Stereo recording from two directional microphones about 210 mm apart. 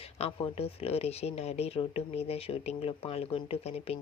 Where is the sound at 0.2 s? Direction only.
30° left (ahead or behind).